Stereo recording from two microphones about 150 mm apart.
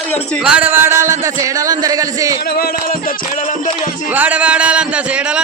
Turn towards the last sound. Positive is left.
turn(degrees=-10)  # may be behind; listen again after turning